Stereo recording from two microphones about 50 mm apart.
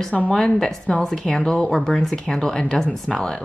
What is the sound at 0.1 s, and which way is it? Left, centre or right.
Speech, centre.